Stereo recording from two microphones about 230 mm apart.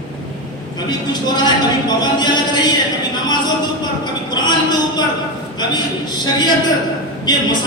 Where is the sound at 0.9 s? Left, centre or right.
Centre.